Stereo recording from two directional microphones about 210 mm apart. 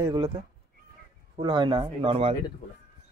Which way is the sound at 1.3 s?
20° right (ahead or behind).